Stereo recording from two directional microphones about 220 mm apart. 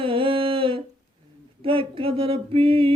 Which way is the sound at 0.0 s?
25° right (ahead or behind).